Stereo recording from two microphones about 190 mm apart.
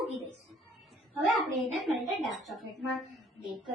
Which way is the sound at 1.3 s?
Centre (ahead or behind).